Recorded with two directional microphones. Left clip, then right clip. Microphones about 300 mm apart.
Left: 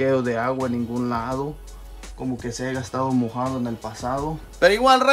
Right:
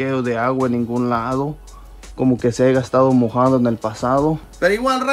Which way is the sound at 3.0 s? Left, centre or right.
Centre.